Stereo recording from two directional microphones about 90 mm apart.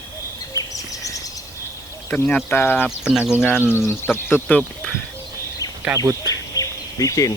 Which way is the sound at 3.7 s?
25° left (ahead or behind).